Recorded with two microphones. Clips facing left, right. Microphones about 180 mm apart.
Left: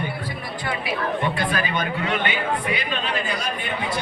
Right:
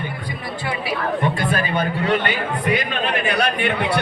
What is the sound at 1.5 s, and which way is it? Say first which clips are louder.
Speech: right 3 dB; 30° right (ahead or behind).